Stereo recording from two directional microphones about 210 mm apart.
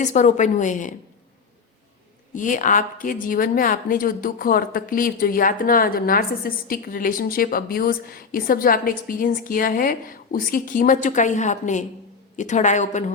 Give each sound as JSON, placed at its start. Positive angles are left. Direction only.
{"t": 0.0, "sound": "a woman's voice", "side_deg": 35}
{"t": 2.3, "sound": "a woman's voice", "side_deg": 40}